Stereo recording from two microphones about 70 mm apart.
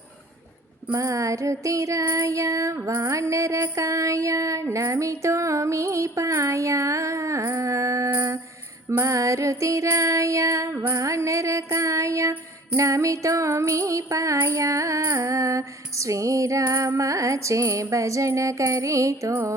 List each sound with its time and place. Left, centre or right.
0.9 s music: right